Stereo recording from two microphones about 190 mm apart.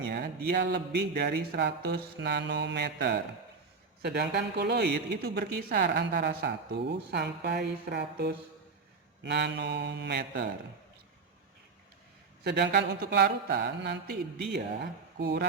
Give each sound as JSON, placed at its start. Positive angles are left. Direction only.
{"t": 0.1, "sound": "speech", "side_deg": -60}
{"t": 12.4, "sound": "speech", "side_deg": -60}